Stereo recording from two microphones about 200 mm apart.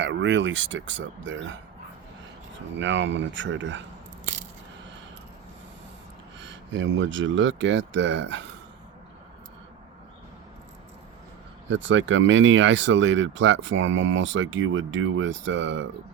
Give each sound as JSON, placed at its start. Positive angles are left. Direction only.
{"t": 0.0, "sound": "speech", "side_deg": -65}
{"t": 2.7, "sound": "speech", "side_deg": -65}
{"t": 6.4, "sound": "speech", "side_deg": -65}
{"t": 11.7, "sound": "speech", "side_deg": -70}